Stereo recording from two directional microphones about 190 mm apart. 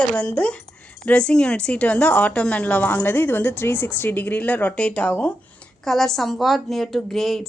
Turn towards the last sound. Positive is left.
turn(degrees=0)  # may be behind; listen again after turning